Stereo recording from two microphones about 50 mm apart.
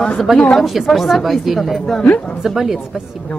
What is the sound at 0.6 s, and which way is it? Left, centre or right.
Speech, centre.